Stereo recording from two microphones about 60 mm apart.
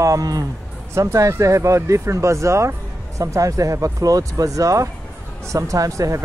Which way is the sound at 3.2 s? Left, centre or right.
Right.